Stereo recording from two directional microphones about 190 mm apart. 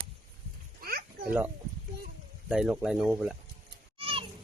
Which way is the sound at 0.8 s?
50° right (ahead or behind).